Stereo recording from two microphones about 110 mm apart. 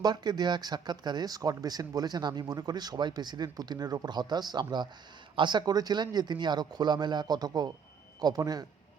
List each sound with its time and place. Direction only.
0.0 s speech: 40° right (ahead or behind)